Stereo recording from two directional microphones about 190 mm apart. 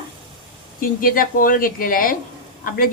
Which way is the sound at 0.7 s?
50° left (ahead or behind).